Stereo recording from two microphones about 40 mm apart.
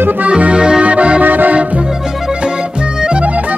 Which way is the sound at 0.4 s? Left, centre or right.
Right.